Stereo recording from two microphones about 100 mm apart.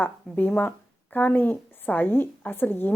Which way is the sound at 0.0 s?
20° left (ahead or behind).